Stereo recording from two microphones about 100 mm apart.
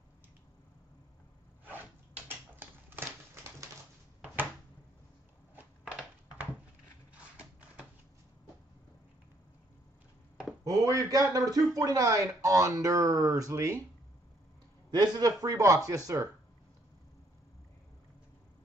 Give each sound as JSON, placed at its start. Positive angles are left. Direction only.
{"t": 1.6, "sound": "a sound", "side_deg": -20}
{"t": 10.6, "sound": "speech", "side_deg": -35}
{"t": 14.9, "sound": "speech", "side_deg": -40}